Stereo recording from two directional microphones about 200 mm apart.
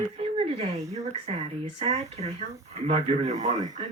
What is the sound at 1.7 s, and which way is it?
Speech, 35° right (ahead or behind).